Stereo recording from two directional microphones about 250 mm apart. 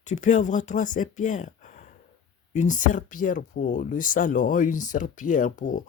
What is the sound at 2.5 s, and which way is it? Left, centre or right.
Speech, left.